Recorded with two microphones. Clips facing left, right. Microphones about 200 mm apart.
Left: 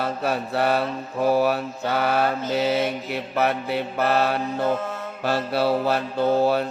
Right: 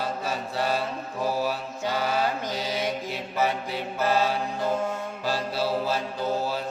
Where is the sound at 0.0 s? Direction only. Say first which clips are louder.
Left 5 dB; 60° left (ahead or behind).